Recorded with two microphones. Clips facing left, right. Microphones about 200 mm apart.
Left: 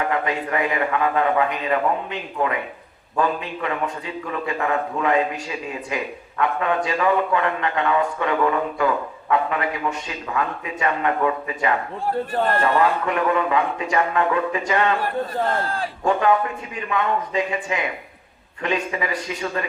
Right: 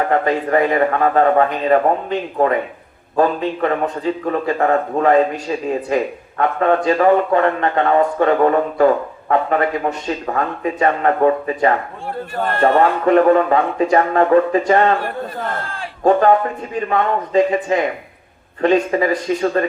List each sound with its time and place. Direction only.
0.0 s a man's voice: 40° right (ahead or behind)
15.6 s a man's voice: 35° left (ahead or behind)
16.0 s a man's voice: 40° right (ahead or behind)